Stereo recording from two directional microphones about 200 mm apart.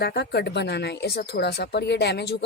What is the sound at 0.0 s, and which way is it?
Speech, 55° left (ahead or behind).